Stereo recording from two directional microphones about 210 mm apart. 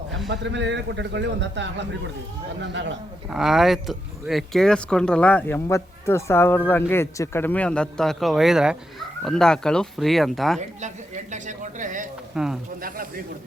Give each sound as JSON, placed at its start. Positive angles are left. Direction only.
{"t": 0.3, "sound": "speech", "side_deg": -60}
{"t": 3.2, "sound": "speech", "side_deg": 0}
{"t": 10.8, "sound": "a woman's voice", "side_deg": -35}
{"t": 12.3, "sound": "speech", "side_deg": -5}
{"t": 12.8, "sound": "speech", "side_deg": -45}